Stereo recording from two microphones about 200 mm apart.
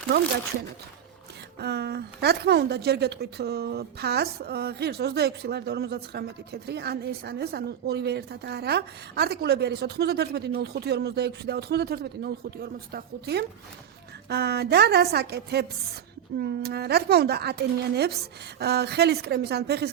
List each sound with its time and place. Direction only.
1.5 s a woman's voice: 55° right (ahead or behind)